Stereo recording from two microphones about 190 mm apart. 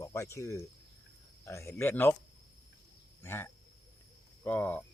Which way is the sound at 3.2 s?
10° left (ahead or behind).